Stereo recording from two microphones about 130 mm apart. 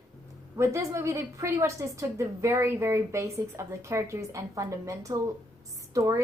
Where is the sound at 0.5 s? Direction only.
20° right (ahead or behind).